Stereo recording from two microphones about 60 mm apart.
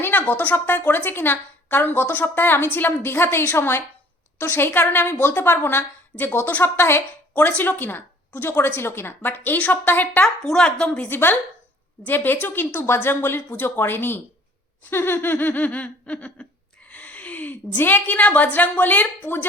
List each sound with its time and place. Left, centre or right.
0.0 s a woman's voice: left
10.4 s a woman's voice: centre
11.1 s a woman's voice: left